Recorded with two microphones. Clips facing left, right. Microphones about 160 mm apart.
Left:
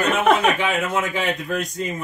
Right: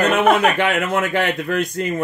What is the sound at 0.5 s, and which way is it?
A man's voice, 70° right (ahead or behind).